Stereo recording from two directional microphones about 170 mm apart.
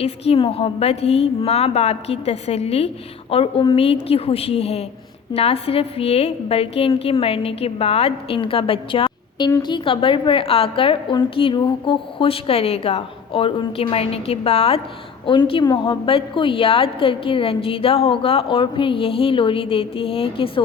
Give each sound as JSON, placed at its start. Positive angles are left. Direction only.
{"t": 0.0, "sound": "a woman's voice", "side_deg": 35}